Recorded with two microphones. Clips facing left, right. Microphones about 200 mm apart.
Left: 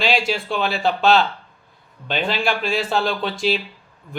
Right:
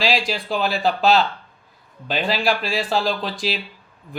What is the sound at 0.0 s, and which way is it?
Speech, centre (ahead or behind).